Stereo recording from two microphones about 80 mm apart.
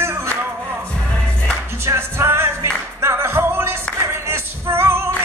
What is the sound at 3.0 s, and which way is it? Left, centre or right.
Singing, right.